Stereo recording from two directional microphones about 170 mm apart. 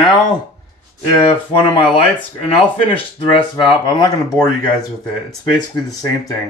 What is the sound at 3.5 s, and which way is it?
Speech, 25° left (ahead or behind).